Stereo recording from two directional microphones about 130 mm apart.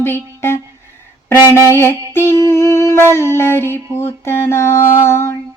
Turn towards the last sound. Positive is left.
turn(degrees=20)  # may be behind; listen again after turning